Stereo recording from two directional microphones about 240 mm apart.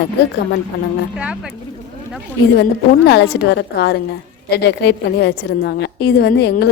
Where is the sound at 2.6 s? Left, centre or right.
Left.